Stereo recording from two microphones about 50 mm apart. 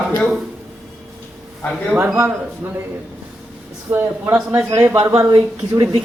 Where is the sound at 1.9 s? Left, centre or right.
Right.